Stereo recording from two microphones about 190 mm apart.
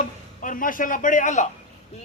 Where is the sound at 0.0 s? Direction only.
45° left (ahead or behind).